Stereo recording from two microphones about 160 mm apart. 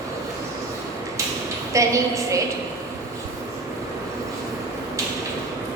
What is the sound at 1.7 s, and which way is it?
Speech, 20° right (ahead or behind).